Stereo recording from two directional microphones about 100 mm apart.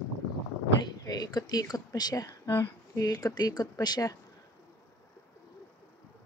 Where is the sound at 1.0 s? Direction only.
40° left (ahead or behind).